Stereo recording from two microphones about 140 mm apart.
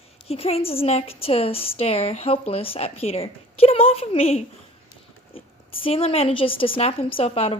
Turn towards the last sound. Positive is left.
turn(degrees=45)  # may be behind; listen again after turning